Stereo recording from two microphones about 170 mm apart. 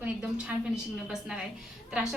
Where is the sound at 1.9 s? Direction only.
5° right (ahead or behind).